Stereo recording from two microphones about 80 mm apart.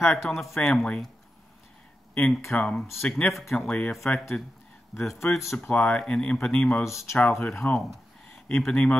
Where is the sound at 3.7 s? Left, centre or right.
Centre.